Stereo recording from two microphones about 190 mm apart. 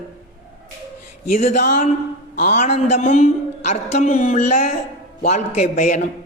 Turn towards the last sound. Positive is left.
turn(degrees=40)  # may be behind; listen again after turning